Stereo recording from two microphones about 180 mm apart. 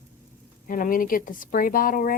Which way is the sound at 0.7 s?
50° left (ahead or behind).